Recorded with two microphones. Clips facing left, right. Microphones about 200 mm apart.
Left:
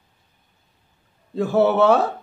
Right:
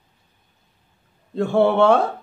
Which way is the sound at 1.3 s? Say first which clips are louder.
Even; 5° left (ahead or behind).